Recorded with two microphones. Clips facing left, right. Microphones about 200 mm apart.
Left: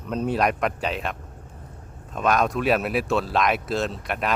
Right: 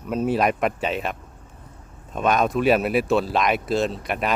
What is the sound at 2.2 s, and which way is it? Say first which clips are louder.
Speech: right 2 dB; centre (ahead or behind).